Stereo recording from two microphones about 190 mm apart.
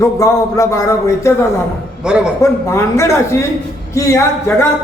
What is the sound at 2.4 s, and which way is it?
A man's voice, 15° left (ahead or behind).